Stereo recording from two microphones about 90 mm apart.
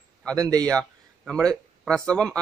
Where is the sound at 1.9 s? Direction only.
10° left (ahead or behind).